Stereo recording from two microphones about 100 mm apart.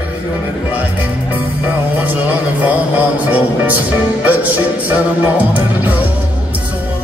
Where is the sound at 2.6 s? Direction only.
15° right (ahead or behind).